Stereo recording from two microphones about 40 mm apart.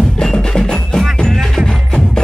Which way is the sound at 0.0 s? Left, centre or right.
Centre.